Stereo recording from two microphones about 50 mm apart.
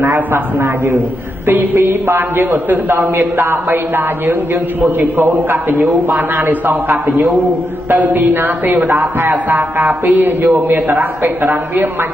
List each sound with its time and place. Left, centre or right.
0.0 s a man's voice: right